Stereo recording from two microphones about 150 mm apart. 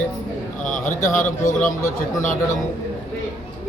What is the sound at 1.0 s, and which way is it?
Speech, 60° left (ahead or behind).